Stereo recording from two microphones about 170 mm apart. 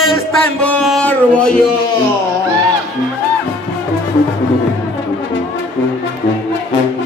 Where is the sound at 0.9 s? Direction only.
5° left (ahead or behind).